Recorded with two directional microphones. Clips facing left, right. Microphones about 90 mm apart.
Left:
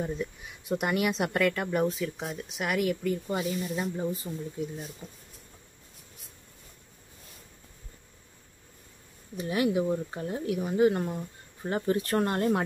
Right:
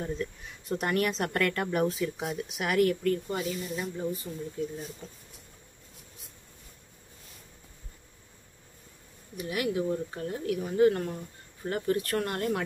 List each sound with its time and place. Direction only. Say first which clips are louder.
0.0 s speech: left 1 dB; 10° left (ahead or behind)
3.3 s speech: left 2 dB; 20° left (ahead or behind)
9.4 s speech: left 3 dB; 25° left (ahead or behind)